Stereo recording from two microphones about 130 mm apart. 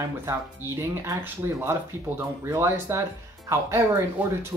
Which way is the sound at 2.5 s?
20° right (ahead or behind).